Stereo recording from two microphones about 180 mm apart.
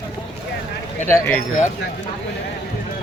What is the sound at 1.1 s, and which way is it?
Speech, 15° left (ahead or behind).